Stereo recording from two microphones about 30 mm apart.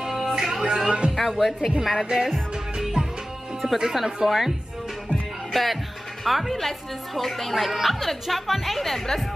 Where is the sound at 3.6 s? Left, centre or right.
Centre.